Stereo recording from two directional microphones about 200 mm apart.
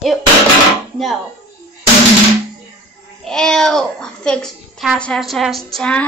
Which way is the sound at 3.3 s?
5° left (ahead or behind).